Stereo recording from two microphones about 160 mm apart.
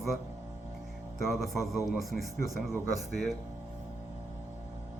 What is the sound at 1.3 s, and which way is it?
Speech, centre (ahead or behind).